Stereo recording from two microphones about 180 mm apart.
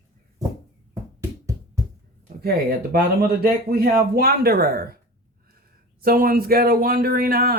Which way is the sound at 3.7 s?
55° right (ahead or behind).